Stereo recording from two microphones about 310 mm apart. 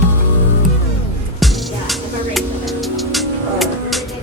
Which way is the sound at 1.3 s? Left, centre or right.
Centre.